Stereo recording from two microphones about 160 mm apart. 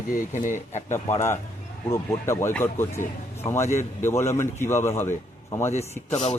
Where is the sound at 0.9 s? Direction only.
15° left (ahead or behind).